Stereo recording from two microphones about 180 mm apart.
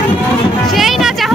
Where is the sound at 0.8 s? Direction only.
Centre (ahead or behind).